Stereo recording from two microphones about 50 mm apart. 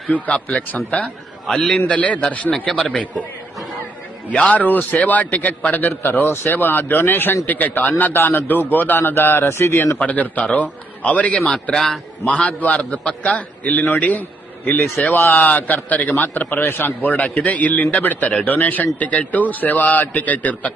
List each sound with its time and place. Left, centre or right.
0.3 s a man's voice: left
1.5 s a man's voice: centre
1.9 s a man's voice: left
4.3 s a man's voice: left
10.0 s a man's voice: left
15.1 s a man's voice: left
15.4 s a man's voice: left